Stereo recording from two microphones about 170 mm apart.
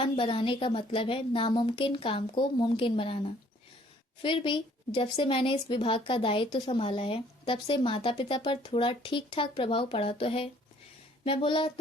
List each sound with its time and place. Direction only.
0.0 s a woman's voice: 30° left (ahead or behind)